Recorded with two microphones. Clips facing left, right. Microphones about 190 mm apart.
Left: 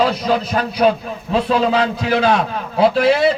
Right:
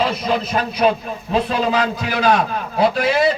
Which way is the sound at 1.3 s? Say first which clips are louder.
Left 3 dB; 30° left (ahead or behind).